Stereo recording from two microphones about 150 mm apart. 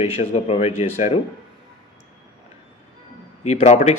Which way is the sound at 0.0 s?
45° left (ahead or behind).